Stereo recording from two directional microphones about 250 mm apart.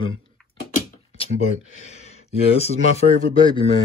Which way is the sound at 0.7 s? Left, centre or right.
Left.